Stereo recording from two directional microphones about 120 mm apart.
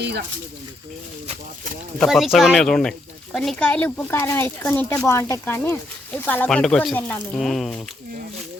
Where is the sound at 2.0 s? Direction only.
Centre (ahead or behind).